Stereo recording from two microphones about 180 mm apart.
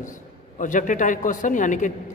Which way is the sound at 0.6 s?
45° left (ahead or behind).